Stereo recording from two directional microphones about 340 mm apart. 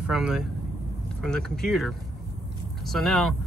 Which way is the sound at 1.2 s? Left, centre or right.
Centre.